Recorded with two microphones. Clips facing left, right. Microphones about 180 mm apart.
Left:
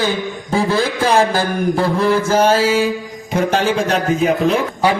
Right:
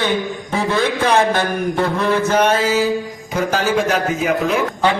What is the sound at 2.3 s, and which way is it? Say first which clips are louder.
A man's voice: left 2 dB; 30° left (ahead or behind).